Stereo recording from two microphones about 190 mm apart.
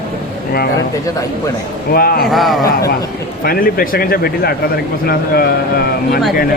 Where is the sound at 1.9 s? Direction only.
50° left (ahead or behind).